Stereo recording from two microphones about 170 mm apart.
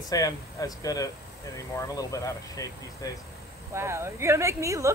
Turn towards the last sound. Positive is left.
turn(degrees=-20)  # may be behind; listen again after turning